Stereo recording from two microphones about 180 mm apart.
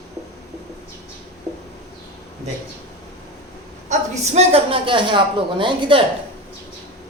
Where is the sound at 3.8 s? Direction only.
40° right (ahead or behind).